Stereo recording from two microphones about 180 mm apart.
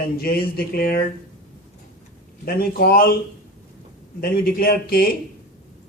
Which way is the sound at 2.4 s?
55° left (ahead or behind).